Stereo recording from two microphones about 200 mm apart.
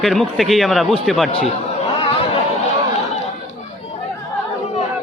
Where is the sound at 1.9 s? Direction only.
30° left (ahead or behind).